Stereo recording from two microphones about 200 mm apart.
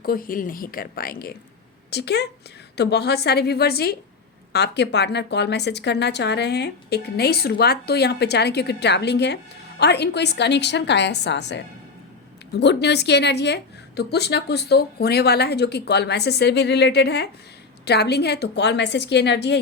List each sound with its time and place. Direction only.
0.0 s a woman's voice: 45° left (ahead or behind)